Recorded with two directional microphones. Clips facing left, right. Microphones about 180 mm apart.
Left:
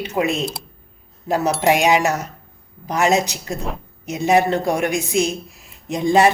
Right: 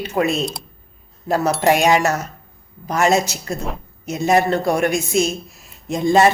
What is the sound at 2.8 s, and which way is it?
Speech, 15° left (ahead or behind).